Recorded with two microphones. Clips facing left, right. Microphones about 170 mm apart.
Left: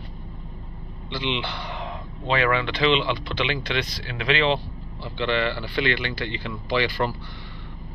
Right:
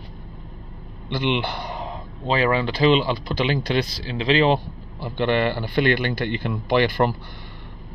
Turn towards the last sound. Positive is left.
turn(degrees=-50)  # may be behind; listen again after turning